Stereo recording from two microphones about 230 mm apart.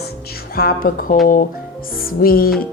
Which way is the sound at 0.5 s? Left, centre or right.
Left.